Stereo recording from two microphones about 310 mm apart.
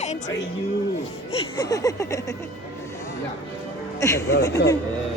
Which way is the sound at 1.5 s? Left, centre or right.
Centre.